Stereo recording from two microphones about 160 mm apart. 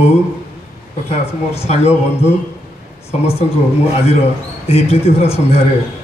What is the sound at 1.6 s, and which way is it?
Speech, 40° left (ahead or behind).